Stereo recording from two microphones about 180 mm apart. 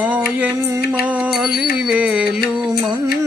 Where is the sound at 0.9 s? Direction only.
10° right (ahead or behind).